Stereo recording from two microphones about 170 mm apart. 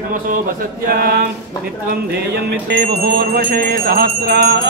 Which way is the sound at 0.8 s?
60° right (ahead or behind).